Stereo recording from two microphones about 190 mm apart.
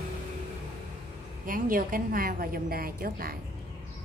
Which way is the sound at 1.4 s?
45° right (ahead or behind).